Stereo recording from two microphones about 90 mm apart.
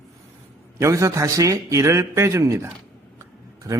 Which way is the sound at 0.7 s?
35° right (ahead or behind).